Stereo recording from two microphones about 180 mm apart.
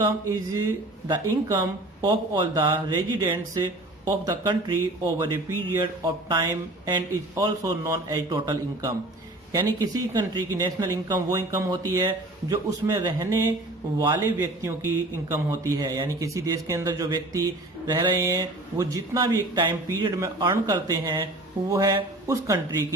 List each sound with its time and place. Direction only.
0.0 s a man's voice: 20° right (ahead or behind)
5.8 s a man's voice: 25° right (ahead or behind)